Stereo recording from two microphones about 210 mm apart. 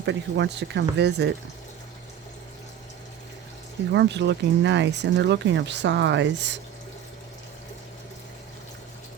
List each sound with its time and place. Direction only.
0.0 s speech: 55° right (ahead or behind)
3.9 s speech: 55° right (ahead or behind)